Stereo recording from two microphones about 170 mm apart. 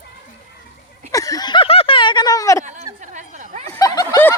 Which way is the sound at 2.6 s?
45° right (ahead or behind).